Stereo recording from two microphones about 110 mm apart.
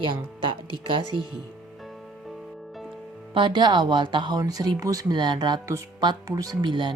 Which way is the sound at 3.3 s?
50° right (ahead or behind).